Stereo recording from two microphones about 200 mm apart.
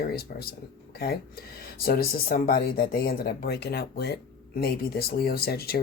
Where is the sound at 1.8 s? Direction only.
50° left (ahead or behind).